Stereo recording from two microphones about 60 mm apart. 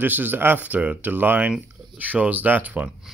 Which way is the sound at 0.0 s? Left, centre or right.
Right.